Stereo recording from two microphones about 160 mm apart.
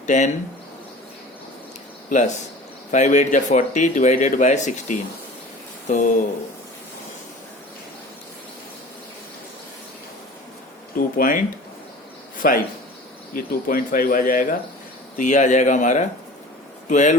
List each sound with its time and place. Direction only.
0.0 s speech: 45° left (ahead or behind)
2.0 s speech: 50° left (ahead or behind)
10.9 s speech: 65° left (ahead or behind)
12.4 s speech: 65° left (ahead or behind); by 17.2 s 50° left (ahead or behind)